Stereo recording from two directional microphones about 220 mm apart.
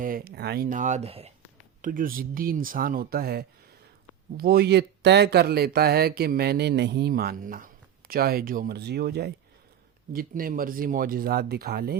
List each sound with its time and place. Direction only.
0.0 s speech: 40° right (ahead or behind)
1.8 s speech: 40° right (ahead or behind)